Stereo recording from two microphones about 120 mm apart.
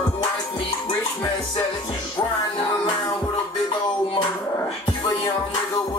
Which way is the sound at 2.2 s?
30° left (ahead or behind).